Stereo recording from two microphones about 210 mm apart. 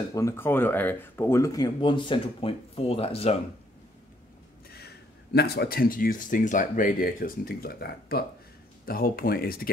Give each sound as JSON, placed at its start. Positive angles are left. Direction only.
{"t": 0.1, "sound": "speech", "side_deg": 15}
{"t": 4.6, "sound": "speech", "side_deg": 50}